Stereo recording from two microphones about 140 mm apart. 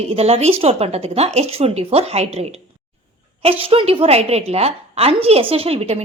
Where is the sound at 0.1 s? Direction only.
45° right (ahead or behind).